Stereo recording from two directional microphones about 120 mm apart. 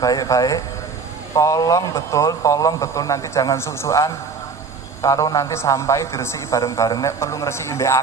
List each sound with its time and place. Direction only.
0.0 s a man's voice: 30° left (ahead or behind)